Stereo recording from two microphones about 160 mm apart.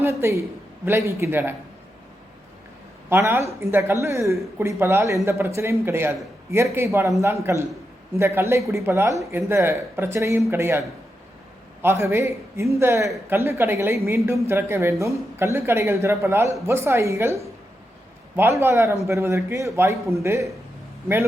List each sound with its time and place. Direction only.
0.0 s a woman's voice: 15° right (ahead or behind)
3.1 s a woman's voice: 15° right (ahead or behind)